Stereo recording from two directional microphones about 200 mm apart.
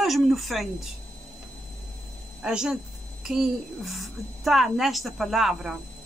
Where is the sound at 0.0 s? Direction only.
Centre (ahead or behind).